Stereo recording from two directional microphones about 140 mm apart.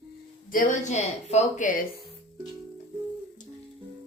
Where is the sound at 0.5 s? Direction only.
65° left (ahead or behind).